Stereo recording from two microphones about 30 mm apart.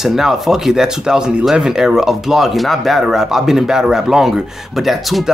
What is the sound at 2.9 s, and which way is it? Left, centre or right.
Speech, centre.